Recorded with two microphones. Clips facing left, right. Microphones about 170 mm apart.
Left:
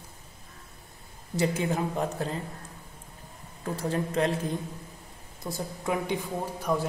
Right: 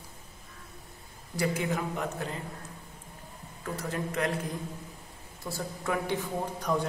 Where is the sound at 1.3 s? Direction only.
25° left (ahead or behind).